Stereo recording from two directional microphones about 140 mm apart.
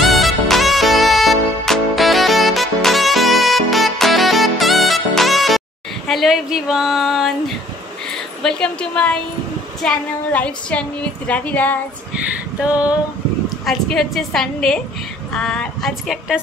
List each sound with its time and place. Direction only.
0.0 s music: centre (ahead or behind)
6.0 s speech: centre (ahead or behind)
8.4 s a woman's voice: 5° left (ahead or behind)
13.7 s a woman's voice: centre (ahead or behind)